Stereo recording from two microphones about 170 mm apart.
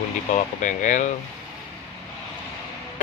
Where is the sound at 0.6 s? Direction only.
45° left (ahead or behind).